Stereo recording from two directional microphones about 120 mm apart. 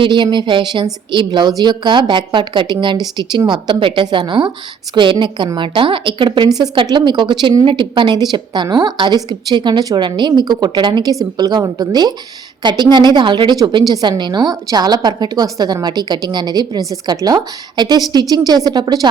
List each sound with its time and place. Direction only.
0.0 s a woman's voice: 40° right (ahead or behind)